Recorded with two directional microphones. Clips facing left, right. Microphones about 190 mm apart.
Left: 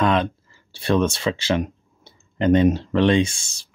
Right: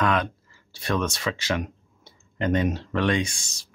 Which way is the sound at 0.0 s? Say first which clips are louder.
Left 4 dB; 25° left (ahead or behind).